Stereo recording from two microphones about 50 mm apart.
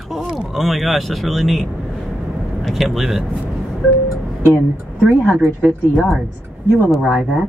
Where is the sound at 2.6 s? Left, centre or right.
Centre.